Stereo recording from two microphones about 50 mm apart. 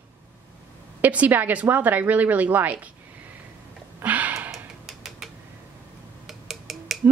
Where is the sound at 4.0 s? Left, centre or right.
Right.